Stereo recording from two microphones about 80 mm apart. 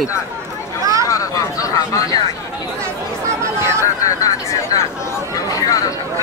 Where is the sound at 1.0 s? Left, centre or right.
Left.